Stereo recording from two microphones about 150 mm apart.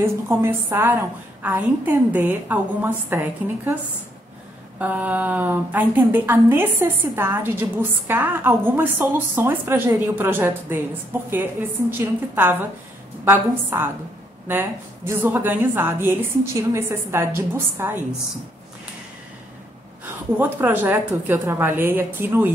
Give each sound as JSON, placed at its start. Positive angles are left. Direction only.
{"t": 0.0, "sound": "a woman's voice", "side_deg": -15}
{"t": 4.7, "sound": "a woman's voice", "side_deg": -10}
{"t": 11.9, "sound": "a woman's voice", "side_deg": -15}
{"t": 20.3, "sound": "a woman's voice", "side_deg": -15}